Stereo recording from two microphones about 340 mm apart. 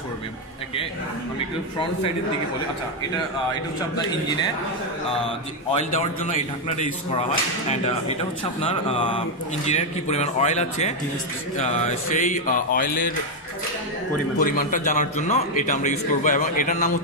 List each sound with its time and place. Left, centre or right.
6.8 s speech: centre
9.7 s a man's voice: centre
14.4 s a man's voice: left